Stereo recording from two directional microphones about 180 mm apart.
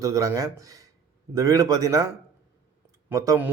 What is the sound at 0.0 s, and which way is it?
A man's voice, 20° right (ahead or behind).